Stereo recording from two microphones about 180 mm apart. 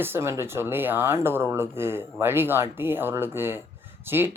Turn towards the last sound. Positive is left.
turn(degrees=-10)  # may be behind; listen again after turning